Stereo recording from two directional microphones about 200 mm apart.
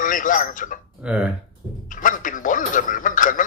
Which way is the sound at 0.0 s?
40° left (ahead or behind).